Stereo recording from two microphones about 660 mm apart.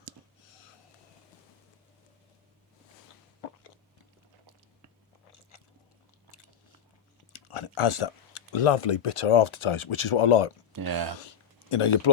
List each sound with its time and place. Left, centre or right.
7.3 s speech: left
10.7 s speech: right
11.7 s speech: left